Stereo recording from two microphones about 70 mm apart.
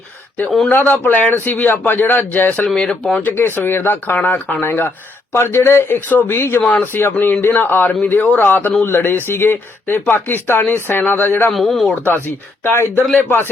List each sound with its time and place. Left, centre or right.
0.7 s speech: left
2.6 s speech: centre
3.2 s speech: left
4.2 s speech: centre
4.6 s speech: left
6.1 s speech: left
6.3 s speech: left
6.7 s speech: left
11.5 s speech: centre
12.6 s speech: left